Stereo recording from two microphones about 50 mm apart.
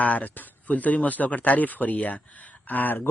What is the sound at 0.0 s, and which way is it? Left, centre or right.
Speech, left.